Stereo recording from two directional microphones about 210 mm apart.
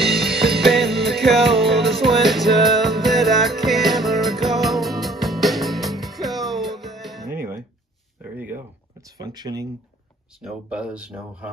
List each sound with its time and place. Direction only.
0.0 s music: centre (ahead or behind)
8.2 s a sound: 10° right (ahead or behind)
10.4 s speech: 5° right (ahead or behind)